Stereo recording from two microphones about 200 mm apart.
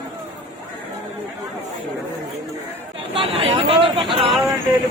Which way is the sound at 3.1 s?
30° right (ahead or behind).